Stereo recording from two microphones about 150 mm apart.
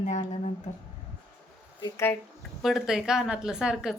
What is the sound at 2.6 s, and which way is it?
A woman's voice, centre (ahead or behind).